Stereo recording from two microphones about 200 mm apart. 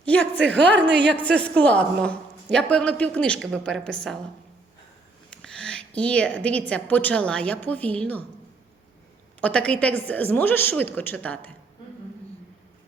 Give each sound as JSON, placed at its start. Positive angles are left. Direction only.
{"t": 0.0, "sound": "a sound", "side_deg": 5}
{"t": 0.9, "sound": "a woman's voice", "side_deg": -60}
{"t": 1.1, "sound": "a man's voice", "side_deg": 5}
{"t": 5.3, "sound": "a woman's voice", "side_deg": 5}
{"t": 9.4, "sound": "a woman's voice", "side_deg": 5}